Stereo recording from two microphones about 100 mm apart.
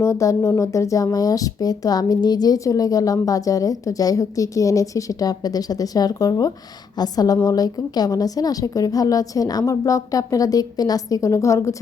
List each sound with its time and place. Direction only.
0.0 s speech: 30° left (ahead or behind)